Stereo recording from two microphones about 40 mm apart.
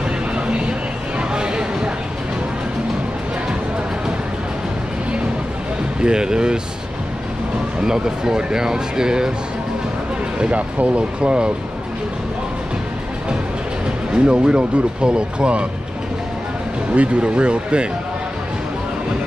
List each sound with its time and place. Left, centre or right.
1.3 s a sound: right
5.9 s speech: right
7.8 s speech: centre
10.4 s speech: right
14.1 s speech: right
16.9 s speech: right